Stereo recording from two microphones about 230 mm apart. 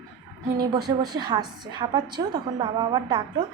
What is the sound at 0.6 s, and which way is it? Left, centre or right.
A woman's voice, centre.